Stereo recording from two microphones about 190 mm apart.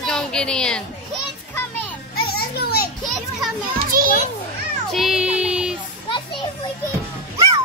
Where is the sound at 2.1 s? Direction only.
55° left (ahead or behind).